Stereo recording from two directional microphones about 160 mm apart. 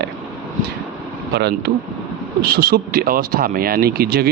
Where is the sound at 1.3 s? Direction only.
90° right.